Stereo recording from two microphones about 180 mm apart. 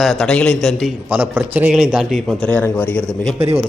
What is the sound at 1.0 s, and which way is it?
A man's voice, 10° right (ahead or behind).